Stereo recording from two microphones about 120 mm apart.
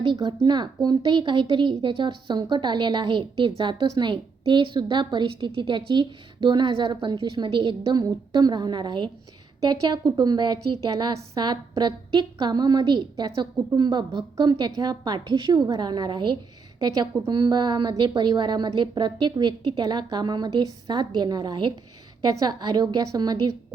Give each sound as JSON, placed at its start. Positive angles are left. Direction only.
{"t": 0.0, "sound": "a woman's voice", "side_deg": -40}